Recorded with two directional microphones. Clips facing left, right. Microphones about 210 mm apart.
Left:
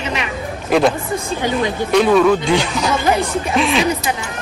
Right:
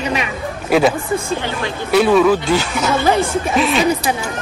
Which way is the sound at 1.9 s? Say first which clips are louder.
Right 1 dB; 5° right (ahead or behind).